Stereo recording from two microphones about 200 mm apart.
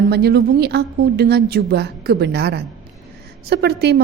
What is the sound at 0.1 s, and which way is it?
A woman's voice, 55° right (ahead or behind).